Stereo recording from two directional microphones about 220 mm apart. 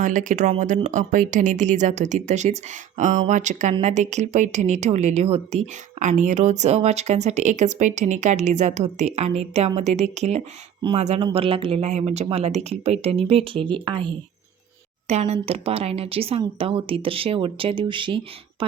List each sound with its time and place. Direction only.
0.0 s speech: 35° right (ahead or behind)